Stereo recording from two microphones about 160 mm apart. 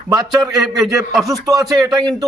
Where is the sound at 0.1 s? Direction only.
25° right (ahead or behind).